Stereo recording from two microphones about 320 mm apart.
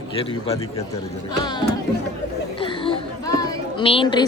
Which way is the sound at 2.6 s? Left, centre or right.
Centre.